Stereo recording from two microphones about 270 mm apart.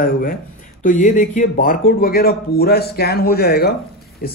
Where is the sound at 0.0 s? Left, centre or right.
Left.